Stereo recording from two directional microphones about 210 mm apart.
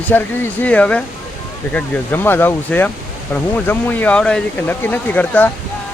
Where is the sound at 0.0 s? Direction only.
10° left (ahead or behind).